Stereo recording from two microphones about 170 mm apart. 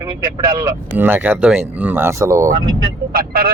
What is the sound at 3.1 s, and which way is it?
Speech, 60° right (ahead or behind).